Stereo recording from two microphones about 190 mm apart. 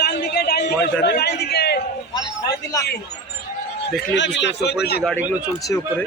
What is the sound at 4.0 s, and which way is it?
Speech, 70° left (ahead or behind).